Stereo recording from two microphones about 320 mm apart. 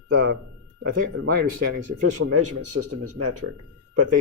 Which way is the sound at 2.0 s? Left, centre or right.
Right.